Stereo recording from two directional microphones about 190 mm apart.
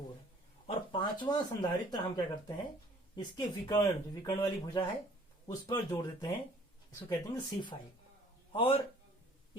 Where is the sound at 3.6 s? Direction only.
20° left (ahead or behind).